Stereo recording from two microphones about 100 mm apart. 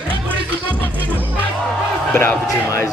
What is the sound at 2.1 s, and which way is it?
Speech, 15° left (ahead or behind).